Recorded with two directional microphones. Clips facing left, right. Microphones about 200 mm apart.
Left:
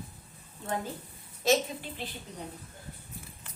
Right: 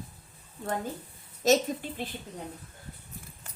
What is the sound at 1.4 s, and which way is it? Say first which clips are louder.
Speech: right 3 dB; 40° right (ahead or behind).